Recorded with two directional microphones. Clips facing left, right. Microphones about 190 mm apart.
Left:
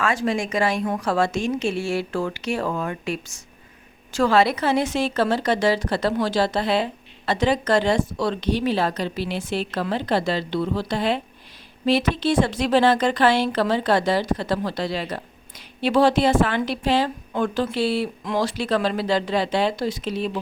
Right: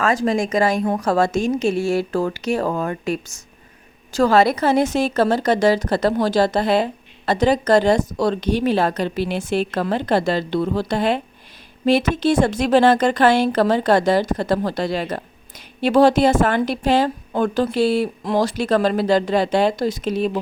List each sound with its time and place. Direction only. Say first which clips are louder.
0.0 s a woman's voice: right 4 dB; 40° right (ahead or behind)